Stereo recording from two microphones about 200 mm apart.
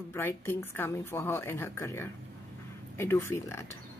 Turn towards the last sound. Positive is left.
turn(degrees=15)  # may be behind; listen again after turning